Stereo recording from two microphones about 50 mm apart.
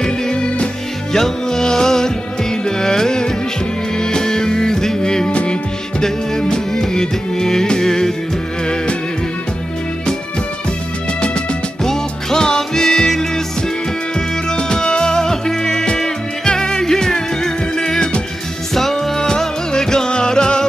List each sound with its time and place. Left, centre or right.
0.0 s music: centre
11.1 s music: left
11.8 s music: centre